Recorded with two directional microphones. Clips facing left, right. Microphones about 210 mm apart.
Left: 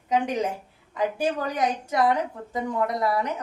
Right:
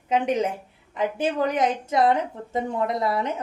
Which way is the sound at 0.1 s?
20° right (ahead or behind).